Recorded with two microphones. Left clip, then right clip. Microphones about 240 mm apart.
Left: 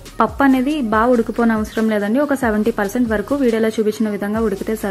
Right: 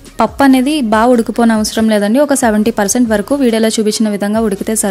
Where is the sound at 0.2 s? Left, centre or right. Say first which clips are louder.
Right 5 dB; right.